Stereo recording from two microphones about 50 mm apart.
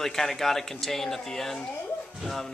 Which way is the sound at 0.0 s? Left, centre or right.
Centre.